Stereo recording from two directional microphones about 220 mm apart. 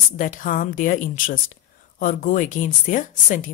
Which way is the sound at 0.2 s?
35° left (ahead or behind).